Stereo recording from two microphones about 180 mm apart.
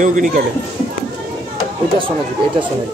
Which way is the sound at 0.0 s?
45° right (ahead or behind).